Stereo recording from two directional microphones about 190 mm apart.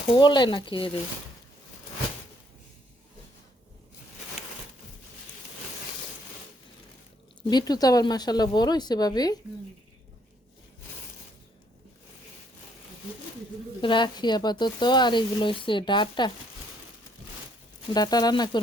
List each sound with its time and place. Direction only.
0.1 s speech: 25° left (ahead or behind)
7.5 s speech: 20° left (ahead or behind)
13.8 s speech: 25° left (ahead or behind)
17.9 s speech: 20° left (ahead or behind)